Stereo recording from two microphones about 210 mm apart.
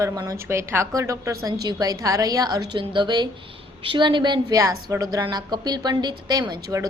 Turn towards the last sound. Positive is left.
turn(degrees=-20)  # may be behind; listen again after turning